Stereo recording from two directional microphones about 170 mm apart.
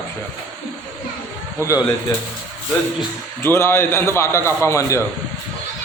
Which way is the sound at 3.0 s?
15° left (ahead or behind).